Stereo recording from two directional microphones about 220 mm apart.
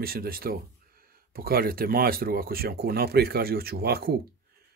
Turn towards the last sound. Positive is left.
turn(degrees=-45)  # may be behind; listen again after turning